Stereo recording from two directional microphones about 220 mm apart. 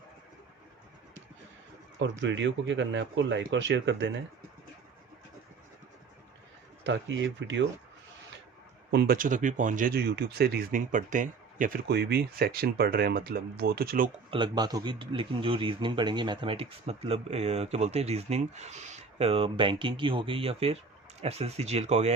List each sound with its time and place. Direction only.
2.0 s speech: 55° right (ahead or behind)
6.8 s speech: 55° right (ahead or behind)
8.9 s speech: 45° right (ahead or behind)
14.3 s speech: 20° right (ahead or behind)